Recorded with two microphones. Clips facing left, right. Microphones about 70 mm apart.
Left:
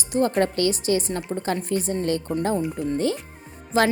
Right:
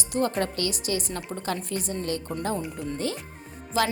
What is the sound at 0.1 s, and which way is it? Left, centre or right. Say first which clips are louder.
A woman's voice: left 5 dB; left.